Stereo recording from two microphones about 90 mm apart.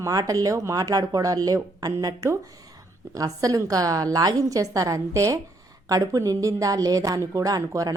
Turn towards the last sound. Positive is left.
turn(degrees=-40)  # may be behind; listen again after turning